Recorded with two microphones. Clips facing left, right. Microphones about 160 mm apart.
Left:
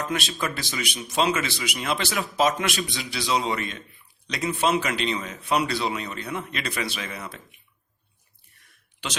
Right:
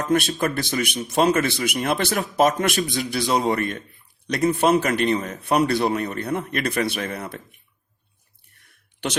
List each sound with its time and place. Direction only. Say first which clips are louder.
0.0 s speech: right 7 dB; 50° right (ahead or behind)